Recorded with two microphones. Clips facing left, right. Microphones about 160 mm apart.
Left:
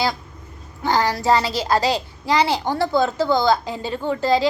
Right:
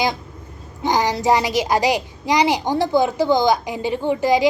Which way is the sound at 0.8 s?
15° right (ahead or behind).